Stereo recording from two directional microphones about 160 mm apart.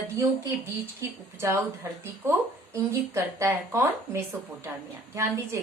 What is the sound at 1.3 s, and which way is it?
Speech, 15° right (ahead or behind).